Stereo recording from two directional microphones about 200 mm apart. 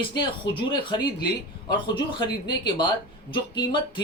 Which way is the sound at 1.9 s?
25° left (ahead or behind).